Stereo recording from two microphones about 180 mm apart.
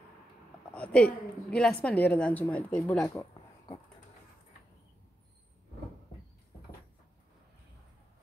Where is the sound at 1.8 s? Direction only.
10° left (ahead or behind).